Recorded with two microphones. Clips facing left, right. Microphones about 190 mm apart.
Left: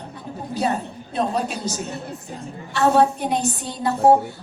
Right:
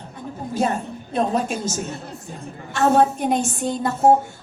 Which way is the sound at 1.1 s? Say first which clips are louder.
Right 2 dB; 50° right (ahead or behind).